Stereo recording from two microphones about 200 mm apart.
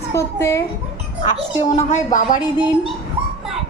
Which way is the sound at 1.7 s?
40° left (ahead or behind).